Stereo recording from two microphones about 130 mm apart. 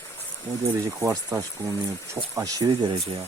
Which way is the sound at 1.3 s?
25° right (ahead or behind).